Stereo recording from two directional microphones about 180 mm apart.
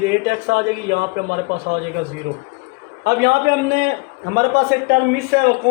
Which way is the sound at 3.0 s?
65° right (ahead or behind).